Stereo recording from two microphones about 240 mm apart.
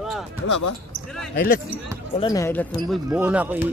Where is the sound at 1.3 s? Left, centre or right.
Left.